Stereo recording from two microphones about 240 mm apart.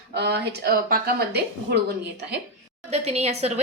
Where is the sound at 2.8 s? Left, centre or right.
Right.